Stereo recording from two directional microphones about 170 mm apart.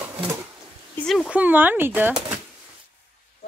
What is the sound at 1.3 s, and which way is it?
Speech, 10° right (ahead or behind).